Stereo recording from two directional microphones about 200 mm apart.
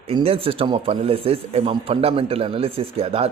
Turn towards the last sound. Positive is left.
turn(degrees=-30)  # may be behind; listen again after turning